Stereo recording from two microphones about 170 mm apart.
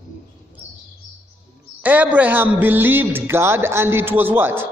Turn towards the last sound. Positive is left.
turn(degrees=-15)  # may be behind; listen again after turning